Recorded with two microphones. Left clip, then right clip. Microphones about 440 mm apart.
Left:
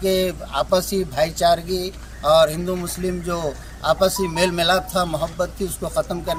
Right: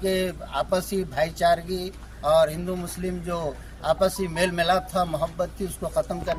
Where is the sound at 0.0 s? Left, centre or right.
Right.